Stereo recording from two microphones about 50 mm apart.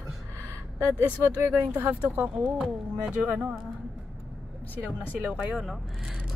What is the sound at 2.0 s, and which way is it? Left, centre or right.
Speech, right.